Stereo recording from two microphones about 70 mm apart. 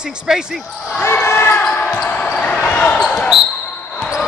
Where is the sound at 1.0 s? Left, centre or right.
Left.